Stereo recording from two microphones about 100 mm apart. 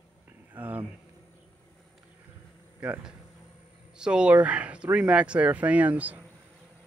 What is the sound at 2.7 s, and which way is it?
Speech, 15° right (ahead or behind).